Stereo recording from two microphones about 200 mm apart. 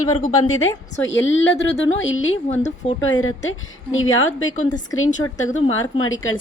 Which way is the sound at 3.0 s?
85° left.